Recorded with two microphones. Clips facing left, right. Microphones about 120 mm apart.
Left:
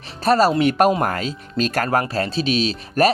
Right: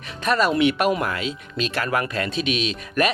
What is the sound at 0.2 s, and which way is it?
A man's voice, 35° left (ahead or behind).